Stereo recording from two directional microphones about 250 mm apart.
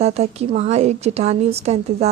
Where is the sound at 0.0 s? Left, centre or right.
Right.